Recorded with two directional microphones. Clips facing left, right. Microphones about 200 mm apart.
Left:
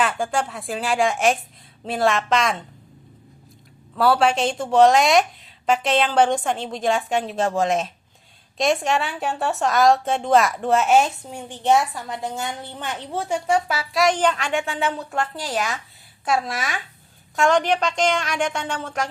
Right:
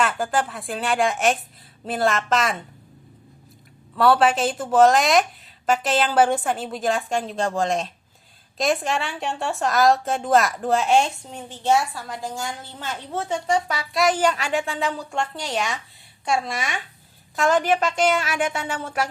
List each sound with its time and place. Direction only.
0.0 s a woman's voice: centre (ahead or behind)
3.9 s a woman's voice: centre (ahead or behind)